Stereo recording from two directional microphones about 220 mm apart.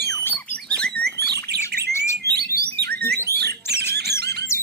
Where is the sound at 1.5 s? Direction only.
45° right (ahead or behind).